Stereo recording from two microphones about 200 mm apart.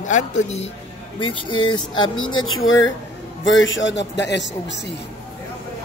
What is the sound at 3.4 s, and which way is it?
A man's voice, 70° left (ahead or behind).